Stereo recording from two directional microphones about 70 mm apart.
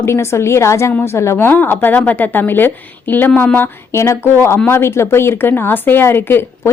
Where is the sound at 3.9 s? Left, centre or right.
Left.